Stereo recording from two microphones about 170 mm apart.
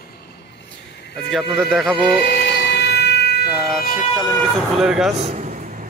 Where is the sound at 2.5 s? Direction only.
85° left.